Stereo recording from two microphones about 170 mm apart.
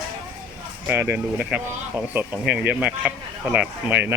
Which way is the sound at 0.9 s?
10° right (ahead or behind).